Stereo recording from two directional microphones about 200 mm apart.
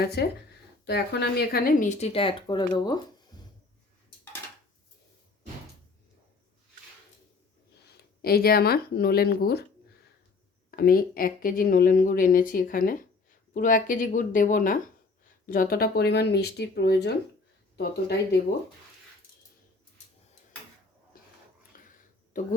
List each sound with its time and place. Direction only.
0.0 s speech: 50° left (ahead or behind); by 3.0 s 20° left (ahead or behind)
8.2 s speech: 50° left (ahead or behind)
10.7 s speech: 50° left (ahead or behind)
22.3 s speech: 40° left (ahead or behind)